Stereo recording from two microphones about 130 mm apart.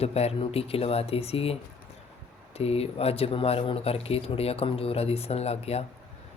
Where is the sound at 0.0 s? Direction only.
50° left (ahead or behind).